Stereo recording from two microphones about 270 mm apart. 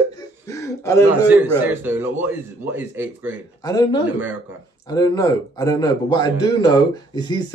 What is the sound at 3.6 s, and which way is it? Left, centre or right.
Speech, centre.